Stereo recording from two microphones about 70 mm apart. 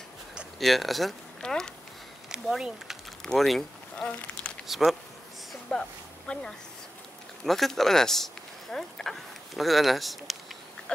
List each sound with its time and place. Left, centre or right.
0.6 s speech: centre
3.3 s speech: centre
5.5 s a sound: centre
7.4 s speech: centre